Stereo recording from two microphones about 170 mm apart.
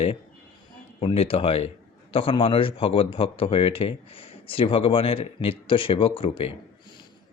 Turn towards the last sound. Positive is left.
turn(degrees=30)  # may be behind; listen again after turning